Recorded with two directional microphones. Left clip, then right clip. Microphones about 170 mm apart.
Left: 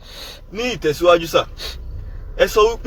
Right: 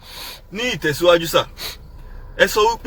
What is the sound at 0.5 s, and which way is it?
Speech, 15° right (ahead or behind).